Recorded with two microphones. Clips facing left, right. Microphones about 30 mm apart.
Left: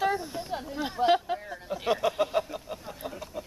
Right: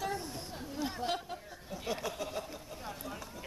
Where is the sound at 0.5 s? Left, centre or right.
Left.